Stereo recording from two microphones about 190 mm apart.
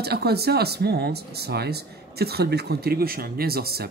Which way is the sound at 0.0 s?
55° right (ahead or behind).